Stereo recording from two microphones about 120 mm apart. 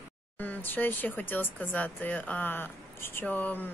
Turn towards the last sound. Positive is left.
turn(degrees=15)  # may be behind; listen again after turning